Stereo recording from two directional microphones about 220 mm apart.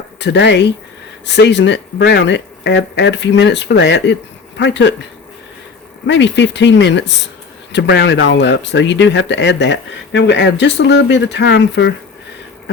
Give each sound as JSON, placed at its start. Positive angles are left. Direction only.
{"t": 0.2, "sound": "speech", "side_deg": 50}
{"t": 6.1, "sound": "speech", "side_deg": 55}